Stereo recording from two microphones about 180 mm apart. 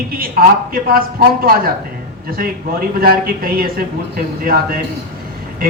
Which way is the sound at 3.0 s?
55° right (ahead or behind).